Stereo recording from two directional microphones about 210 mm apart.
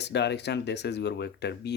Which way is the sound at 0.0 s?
55° left (ahead or behind).